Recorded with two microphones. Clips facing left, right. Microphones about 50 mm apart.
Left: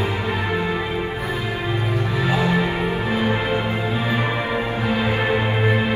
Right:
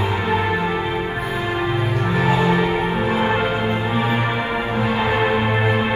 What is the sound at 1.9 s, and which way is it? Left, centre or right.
Music, right.